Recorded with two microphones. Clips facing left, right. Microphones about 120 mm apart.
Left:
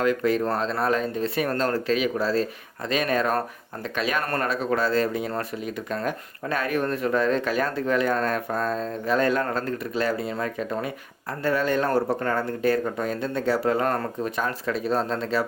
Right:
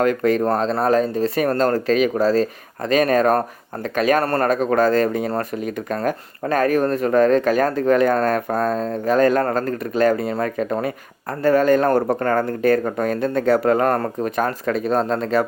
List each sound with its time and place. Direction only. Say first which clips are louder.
0.0 s speech: right 5 dB; 50° right (ahead or behind)